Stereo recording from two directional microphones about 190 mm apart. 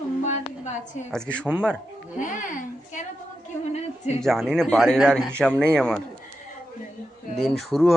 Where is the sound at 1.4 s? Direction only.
10° right (ahead or behind).